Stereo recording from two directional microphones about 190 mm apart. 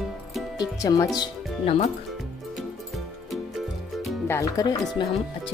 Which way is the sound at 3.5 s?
Centre (ahead or behind).